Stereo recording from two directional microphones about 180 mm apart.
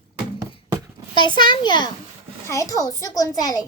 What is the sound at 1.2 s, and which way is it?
A woman's voice, 25° left (ahead or behind).